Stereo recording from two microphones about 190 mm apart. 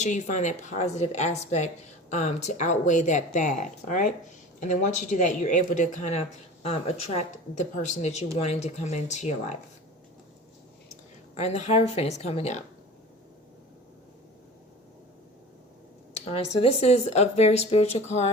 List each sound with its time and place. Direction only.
0.0 s a woman's voice: 40° left (ahead or behind)
11.3 s a woman's voice: 35° left (ahead or behind)
16.2 s a woman's voice: 30° left (ahead or behind)